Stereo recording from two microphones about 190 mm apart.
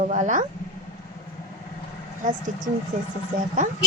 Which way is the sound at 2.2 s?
40° right (ahead or behind).